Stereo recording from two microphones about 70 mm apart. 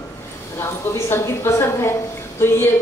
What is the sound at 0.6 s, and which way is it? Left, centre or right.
A woman's voice, left.